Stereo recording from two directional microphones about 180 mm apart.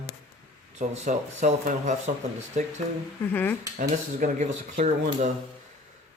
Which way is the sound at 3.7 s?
45° right (ahead or behind).